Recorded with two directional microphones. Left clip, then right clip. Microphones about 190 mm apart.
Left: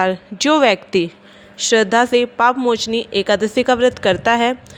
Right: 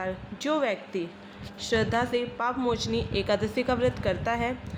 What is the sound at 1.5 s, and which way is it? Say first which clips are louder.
A woman's voice: left 13 dB; 40° left (ahead or behind).